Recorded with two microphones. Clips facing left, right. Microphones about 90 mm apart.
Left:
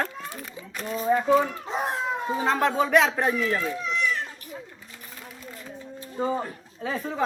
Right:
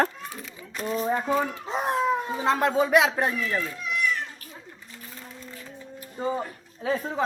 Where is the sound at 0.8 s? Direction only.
5° right (ahead or behind).